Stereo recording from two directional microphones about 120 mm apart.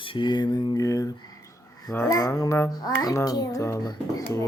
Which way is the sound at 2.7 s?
35° left (ahead or behind).